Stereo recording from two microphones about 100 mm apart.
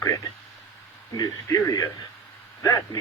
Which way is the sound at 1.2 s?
30° left (ahead or behind).